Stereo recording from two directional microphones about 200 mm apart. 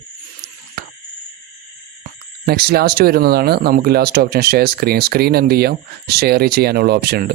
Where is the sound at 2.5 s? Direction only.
50° right (ahead or behind).